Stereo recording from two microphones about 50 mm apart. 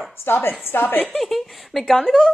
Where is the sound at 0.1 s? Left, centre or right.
Left.